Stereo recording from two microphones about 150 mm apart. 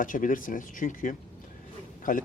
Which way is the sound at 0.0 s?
60° left (ahead or behind).